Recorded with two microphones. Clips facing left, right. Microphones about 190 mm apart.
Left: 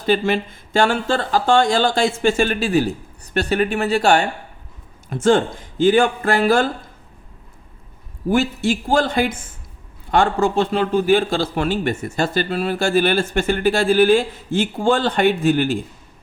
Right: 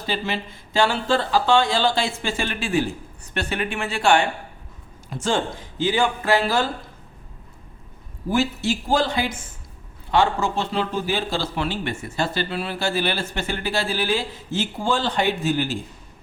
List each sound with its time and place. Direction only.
0.0 s a man's voice: 55° left (ahead or behind)
5.0 s a man's voice: 55° left (ahead or behind)
8.3 s a man's voice: 50° left (ahead or behind)